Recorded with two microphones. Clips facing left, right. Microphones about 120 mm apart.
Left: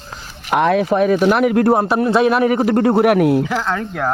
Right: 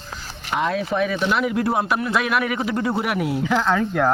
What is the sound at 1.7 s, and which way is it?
Speech, 40° left (ahead or behind).